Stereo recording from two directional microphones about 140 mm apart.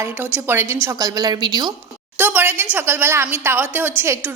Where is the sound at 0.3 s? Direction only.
15° right (ahead or behind).